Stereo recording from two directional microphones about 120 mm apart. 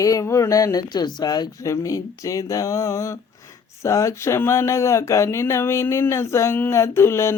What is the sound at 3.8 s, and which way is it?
Speech, 25° left (ahead or behind).